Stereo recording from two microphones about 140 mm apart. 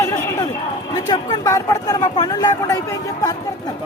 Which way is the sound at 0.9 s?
25° left (ahead or behind).